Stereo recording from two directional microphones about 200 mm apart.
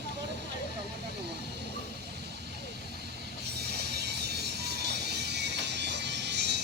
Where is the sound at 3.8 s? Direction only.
55° right (ahead or behind).